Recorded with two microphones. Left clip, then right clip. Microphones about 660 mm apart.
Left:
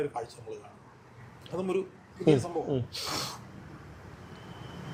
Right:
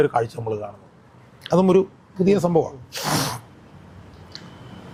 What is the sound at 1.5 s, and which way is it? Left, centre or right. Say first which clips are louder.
Speech: right 14 dB; right.